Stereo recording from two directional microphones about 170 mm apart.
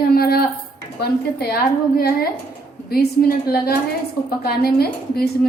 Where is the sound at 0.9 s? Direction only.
70° left (ahead or behind).